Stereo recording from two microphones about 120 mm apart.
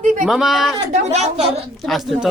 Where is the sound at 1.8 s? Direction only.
Centre (ahead or behind).